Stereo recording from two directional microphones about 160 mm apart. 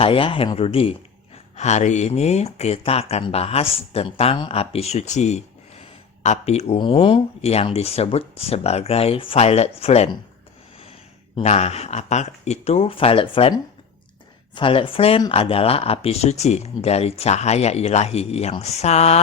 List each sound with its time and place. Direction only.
0.0 s a man's voice: 35° left (ahead or behind)
11.3 s a man's voice: 40° left (ahead or behind)
14.5 s a man's voice: 35° left (ahead or behind)